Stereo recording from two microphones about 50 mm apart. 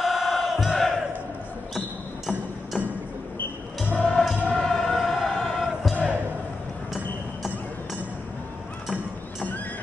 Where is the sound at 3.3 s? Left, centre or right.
Left.